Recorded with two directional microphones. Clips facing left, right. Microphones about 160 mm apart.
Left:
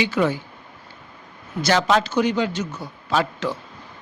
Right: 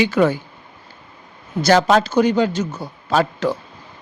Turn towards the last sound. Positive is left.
turn(degrees=-40)  # may be behind; listen again after turning